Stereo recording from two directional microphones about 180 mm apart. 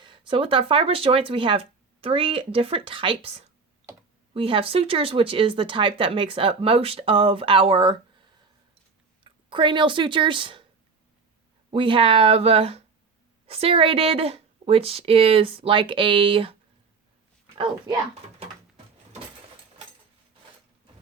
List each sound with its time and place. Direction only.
0.0 s speech: 25° right (ahead or behind)
9.2 s speech: 25° right (ahead or behind)
11.7 s speech: 30° right (ahead or behind)